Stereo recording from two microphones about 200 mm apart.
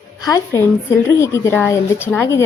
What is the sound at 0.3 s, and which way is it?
A woman's voice, 15° left (ahead or behind).